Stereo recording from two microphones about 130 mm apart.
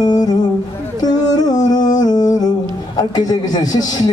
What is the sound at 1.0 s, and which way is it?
Music, 30° left (ahead or behind).